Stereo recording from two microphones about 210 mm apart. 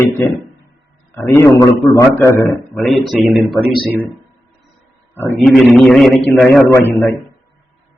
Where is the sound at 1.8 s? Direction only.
Centre (ahead or behind).